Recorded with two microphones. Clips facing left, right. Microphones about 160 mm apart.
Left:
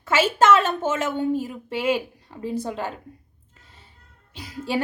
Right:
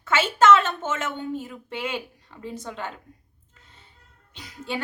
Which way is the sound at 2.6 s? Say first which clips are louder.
Left 6 dB; 35° left (ahead or behind).